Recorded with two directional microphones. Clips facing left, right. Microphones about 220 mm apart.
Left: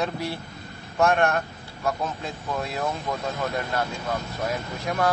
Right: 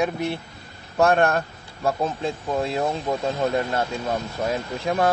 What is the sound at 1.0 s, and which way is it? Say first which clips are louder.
Speech: right 3 dB; 35° right (ahead or behind).